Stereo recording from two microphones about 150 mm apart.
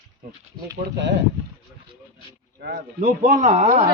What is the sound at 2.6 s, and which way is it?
Speech, 80° right.